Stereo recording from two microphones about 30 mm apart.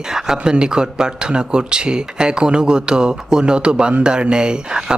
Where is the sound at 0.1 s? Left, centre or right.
Right.